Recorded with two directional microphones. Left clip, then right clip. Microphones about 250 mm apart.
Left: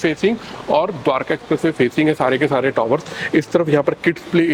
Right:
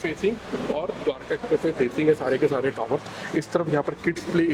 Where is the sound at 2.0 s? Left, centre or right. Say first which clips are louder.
Left 3 dB; left.